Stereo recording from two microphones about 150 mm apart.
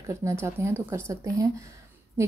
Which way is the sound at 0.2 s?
20° right (ahead or behind).